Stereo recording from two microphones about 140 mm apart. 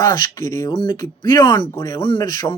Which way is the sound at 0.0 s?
30° left (ahead or behind).